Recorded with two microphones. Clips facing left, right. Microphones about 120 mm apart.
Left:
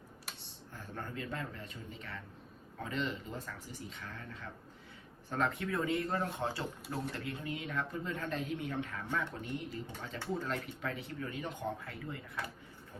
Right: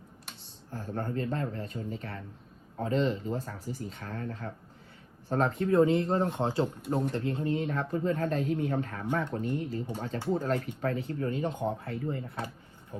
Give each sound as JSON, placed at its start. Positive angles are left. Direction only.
{"t": 0.7, "sound": "speech", "side_deg": -35}